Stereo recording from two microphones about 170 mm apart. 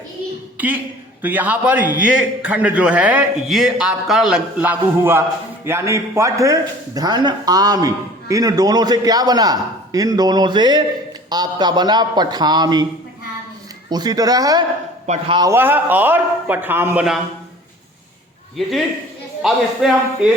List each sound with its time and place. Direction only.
0.5 s a woman's voice: 10° right (ahead or behind)
13.9 s a man's voice: 20° right (ahead or behind)
15.0 s a man's voice: 40° right (ahead or behind)
15.4 s a man's voice: 15° right (ahead or behind)
19.4 s a man's voice: 5° right (ahead or behind)